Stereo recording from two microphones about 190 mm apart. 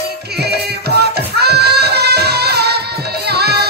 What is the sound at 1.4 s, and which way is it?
Music, 60° right (ahead or behind).